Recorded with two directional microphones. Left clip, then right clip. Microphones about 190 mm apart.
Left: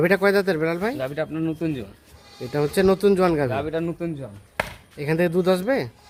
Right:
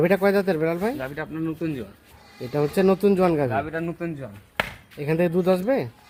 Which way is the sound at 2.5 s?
10° right (ahead or behind).